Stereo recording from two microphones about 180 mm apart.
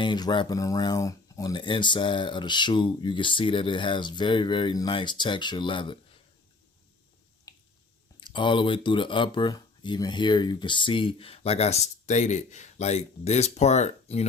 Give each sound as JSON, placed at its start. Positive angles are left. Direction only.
{"t": 0.0, "sound": "speech", "side_deg": 25}
{"t": 7.5, "sound": "finger snapping", "side_deg": 20}
{"t": 8.2, "sound": "speech", "side_deg": 25}